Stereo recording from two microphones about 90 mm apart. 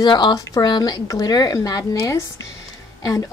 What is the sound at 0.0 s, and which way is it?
A woman's voice, 50° left (ahead or behind).